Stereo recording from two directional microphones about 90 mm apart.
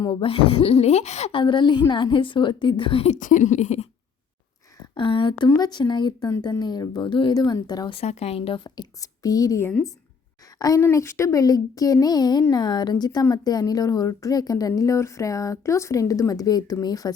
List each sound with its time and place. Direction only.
0.1 s speech: 90° left
1.3 s a woman's voice: 65° left (ahead or behind)
4.9 s speech: 75° left (ahead or behind)
5.5 s speech: 45° left (ahead or behind)
7.3 s speech: 50° left (ahead or behind)
7.9 s speech: 90° left
8.6 s speech: 45° left (ahead or behind)
10.9 s speech: 30° left (ahead or behind); by 17.1 s 45° left (ahead or behind)